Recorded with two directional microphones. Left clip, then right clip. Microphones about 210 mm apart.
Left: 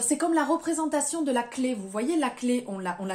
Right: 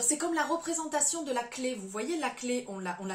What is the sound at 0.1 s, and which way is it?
A woman's voice, 40° left (ahead or behind).